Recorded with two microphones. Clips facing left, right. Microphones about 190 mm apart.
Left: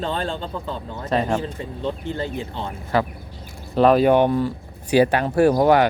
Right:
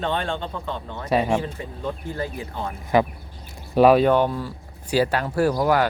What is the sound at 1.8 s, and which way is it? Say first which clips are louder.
Speech: left 2 dB; 25° left (ahead or behind).